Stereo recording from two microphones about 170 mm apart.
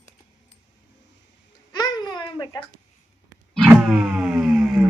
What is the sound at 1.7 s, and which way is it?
Babbling, 25° left (ahead or behind).